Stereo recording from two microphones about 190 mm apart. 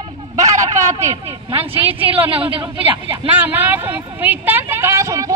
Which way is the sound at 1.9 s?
30° right (ahead or behind).